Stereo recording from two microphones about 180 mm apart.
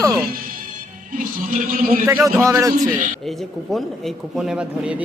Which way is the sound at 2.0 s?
15° right (ahead or behind).